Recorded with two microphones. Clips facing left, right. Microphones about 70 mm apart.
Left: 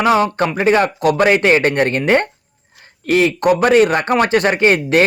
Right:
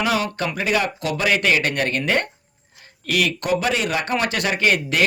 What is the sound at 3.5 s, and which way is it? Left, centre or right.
Speech, left.